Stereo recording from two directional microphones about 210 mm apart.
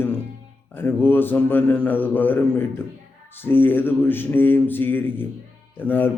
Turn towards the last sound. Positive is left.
turn(degrees=10)  # may be behind; listen again after turning